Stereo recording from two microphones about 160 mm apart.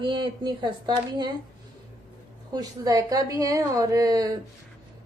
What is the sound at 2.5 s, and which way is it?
A woman's voice, 20° right (ahead or behind).